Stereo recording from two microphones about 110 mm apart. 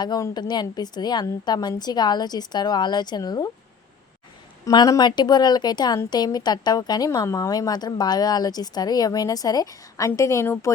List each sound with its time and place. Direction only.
0.0 s a woman's voice: 40° left (ahead or behind)
4.7 s a woman's voice: 40° left (ahead or behind)